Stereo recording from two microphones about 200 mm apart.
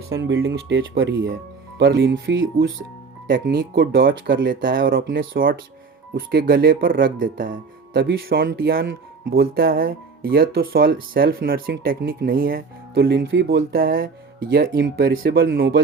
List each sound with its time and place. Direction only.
0.2 s speech: 65° right (ahead or behind)
1.8 s speech: 55° right (ahead or behind)
3.2 s speech: 45° right (ahead or behind)
4.3 s speech: 60° right (ahead or behind)
4.6 s speech: 45° right (ahead or behind)
15.2 s speech: 60° right (ahead or behind)